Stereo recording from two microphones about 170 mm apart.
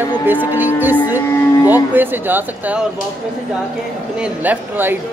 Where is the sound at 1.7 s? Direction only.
10° right (ahead or behind).